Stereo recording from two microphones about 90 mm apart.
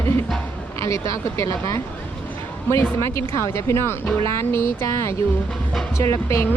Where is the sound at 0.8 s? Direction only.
35° left (ahead or behind).